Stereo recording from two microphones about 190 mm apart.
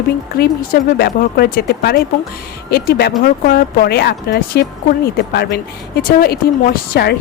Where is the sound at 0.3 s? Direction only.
55° left (ahead or behind).